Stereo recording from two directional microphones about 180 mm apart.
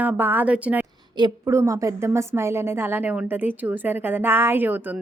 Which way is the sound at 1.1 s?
20° right (ahead or behind).